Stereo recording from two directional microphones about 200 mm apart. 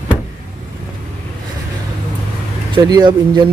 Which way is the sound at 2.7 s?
20° right (ahead or behind).